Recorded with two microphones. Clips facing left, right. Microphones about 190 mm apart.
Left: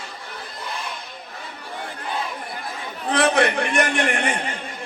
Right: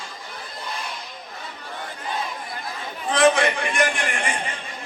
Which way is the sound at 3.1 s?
60° left (ahead or behind).